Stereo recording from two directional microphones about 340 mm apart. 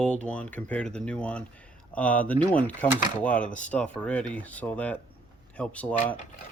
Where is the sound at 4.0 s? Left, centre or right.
Centre.